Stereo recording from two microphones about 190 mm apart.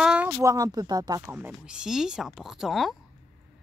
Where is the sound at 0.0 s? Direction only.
5° right (ahead or behind).